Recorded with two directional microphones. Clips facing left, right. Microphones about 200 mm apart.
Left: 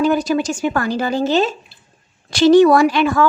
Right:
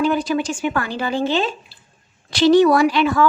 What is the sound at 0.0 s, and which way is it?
A woman's voice, 40° left (ahead or behind).